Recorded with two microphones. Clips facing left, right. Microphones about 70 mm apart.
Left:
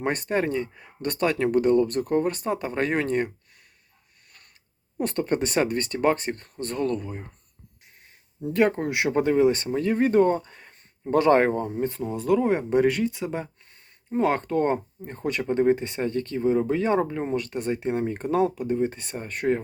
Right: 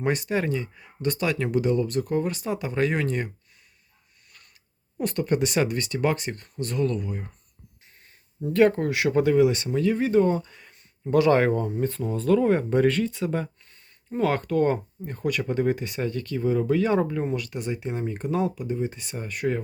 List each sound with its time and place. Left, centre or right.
0.0 s speech: left
4.9 s speech: left
8.4 s speech: left
17.4 s speech: left